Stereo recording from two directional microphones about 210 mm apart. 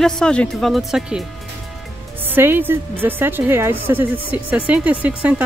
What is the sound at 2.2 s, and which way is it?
A woman's voice, 10° right (ahead or behind).